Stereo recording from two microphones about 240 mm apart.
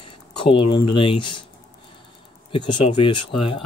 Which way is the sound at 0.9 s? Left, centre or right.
Left.